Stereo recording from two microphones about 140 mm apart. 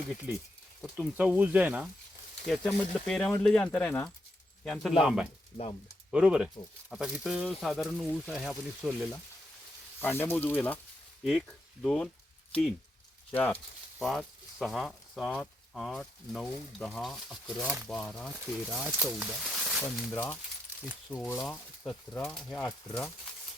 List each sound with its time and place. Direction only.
0.9 s speech: 10° right (ahead or behind)
2.5 s speech: centre (ahead or behind)
10.0 s speech: 15° left (ahead or behind)
11.2 s speech: centre (ahead or behind)
13.3 s speech: 10° left (ahead or behind)
14.0 s speech: centre (ahead or behind)
19.1 s a sound: 5° right (ahead or behind)
19.8 s speech: 10° left (ahead or behind)
22.9 s speech: 20° left (ahead or behind)